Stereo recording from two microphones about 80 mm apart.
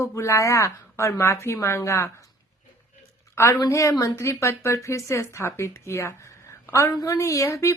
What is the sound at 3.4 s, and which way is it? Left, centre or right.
A woman's voice, left.